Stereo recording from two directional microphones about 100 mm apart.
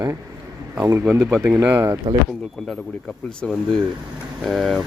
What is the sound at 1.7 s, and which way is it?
Speech, 25° right (ahead or behind).